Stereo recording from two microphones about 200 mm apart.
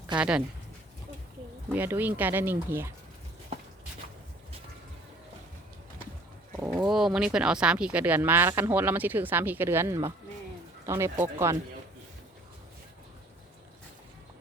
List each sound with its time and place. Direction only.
0.2 s speech: 5° right (ahead or behind)
1.7 s speech: 10° right (ahead or behind)
6.6 s speech: 5° right (ahead or behind)